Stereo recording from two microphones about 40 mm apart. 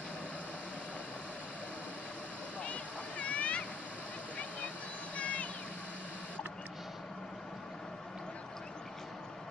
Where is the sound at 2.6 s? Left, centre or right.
Left.